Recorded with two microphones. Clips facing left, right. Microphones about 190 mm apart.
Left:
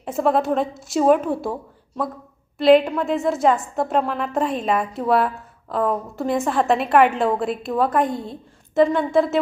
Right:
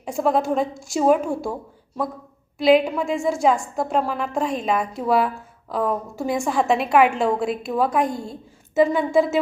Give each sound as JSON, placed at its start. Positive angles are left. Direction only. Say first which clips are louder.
{"t": 0.0, "sound": "a woman's voice", "louder": "left 1 dB", "side_deg": 0}
{"t": 2.6, "sound": "a woman's voice", "louder": "left 2 dB", "side_deg": 0}